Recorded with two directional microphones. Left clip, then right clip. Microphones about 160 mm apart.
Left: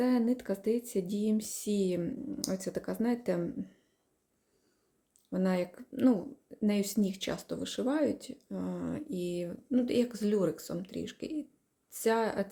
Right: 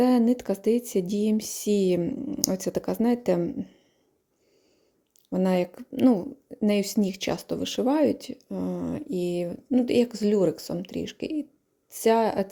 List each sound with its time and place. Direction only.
0.0 s speech: 40° right (ahead or behind)
5.3 s speech: 40° right (ahead or behind)